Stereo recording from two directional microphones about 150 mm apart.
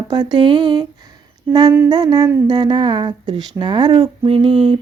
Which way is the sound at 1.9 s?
25° right (ahead or behind).